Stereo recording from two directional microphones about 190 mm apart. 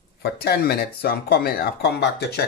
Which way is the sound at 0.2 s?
55° left (ahead or behind).